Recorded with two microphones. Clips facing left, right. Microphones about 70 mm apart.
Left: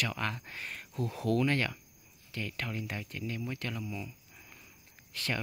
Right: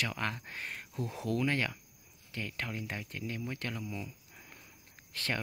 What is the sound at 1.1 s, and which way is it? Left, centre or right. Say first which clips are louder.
Speech: left 3 dB; centre.